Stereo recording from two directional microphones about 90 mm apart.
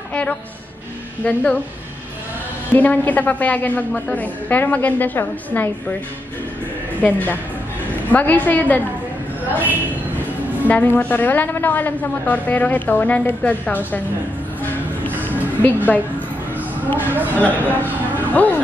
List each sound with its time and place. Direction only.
1.2 s a woman's voice: 10° left (ahead or behind)
2.7 s a woman's voice: 20° left (ahead or behind)
7.0 s a woman's voice: 20° left (ahead or behind)
10.7 s a woman's voice: 20° left (ahead or behind)
15.6 s a woman's voice: 20° left (ahead or behind)
17.0 s speech: 20° right (ahead or behind)
17.4 s a woman's voice: 20° left (ahead or behind)
18.1 s vehicle: 20° left (ahead or behind)